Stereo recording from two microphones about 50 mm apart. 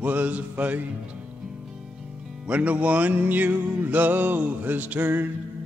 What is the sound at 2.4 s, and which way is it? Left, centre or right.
Music, right.